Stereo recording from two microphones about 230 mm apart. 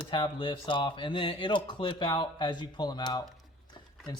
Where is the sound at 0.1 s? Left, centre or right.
Left.